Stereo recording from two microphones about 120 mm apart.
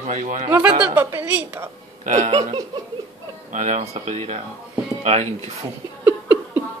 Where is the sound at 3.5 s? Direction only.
90° right; by 5.5 s 65° right (ahead or behind).